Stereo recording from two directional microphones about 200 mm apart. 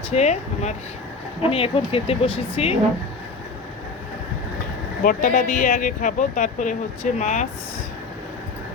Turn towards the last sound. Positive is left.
turn(degrees=35)  # may be behind; listen again after turning